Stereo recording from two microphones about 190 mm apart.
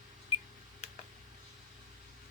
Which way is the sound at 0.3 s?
30° left (ahead or behind).